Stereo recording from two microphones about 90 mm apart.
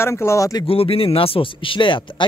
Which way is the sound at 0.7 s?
90° left.